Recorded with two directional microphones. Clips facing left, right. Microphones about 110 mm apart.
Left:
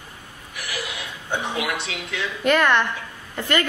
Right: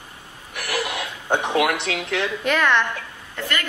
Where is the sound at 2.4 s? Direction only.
Centre (ahead or behind).